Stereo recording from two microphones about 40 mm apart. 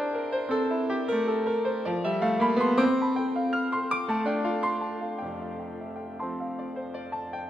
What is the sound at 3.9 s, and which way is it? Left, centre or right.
Music, centre.